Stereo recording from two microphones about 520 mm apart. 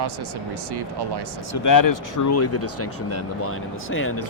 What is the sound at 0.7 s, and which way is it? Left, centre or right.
Speech, right.